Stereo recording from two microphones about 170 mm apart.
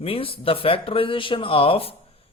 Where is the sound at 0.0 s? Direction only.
35° left (ahead or behind).